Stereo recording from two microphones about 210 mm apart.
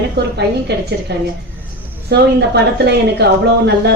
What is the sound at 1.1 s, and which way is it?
A woman's voice, 55° right (ahead or behind).